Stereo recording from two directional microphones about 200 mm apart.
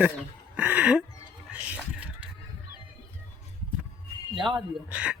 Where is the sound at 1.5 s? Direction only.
5° right (ahead or behind).